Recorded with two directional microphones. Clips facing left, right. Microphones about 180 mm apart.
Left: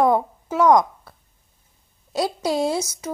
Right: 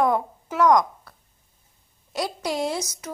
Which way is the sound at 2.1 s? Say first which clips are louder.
Left 5 dB; 30° left (ahead or behind).